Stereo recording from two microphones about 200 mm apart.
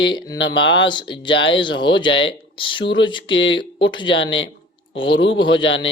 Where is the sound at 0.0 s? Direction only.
25° left (ahead or behind).